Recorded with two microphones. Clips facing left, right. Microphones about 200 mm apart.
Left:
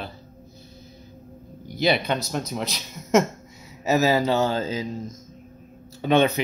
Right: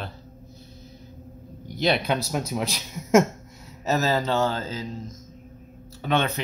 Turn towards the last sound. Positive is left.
turn(degrees=15)  # may be behind; listen again after turning